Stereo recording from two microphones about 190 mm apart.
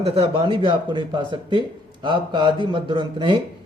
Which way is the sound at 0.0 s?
30° right (ahead or behind).